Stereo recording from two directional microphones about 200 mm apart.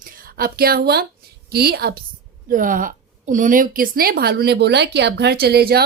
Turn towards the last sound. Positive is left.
turn(degrees=-50)  # may be behind; listen again after turning